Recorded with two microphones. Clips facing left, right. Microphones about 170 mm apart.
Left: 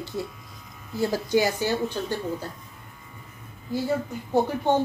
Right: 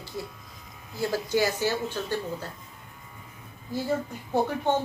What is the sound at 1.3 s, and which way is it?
Speech, 15° left (ahead or behind).